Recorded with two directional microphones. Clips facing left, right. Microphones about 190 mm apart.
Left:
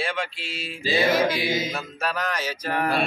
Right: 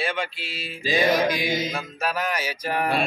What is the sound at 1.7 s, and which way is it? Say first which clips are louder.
Music: right 1 dB; centre (ahead or behind).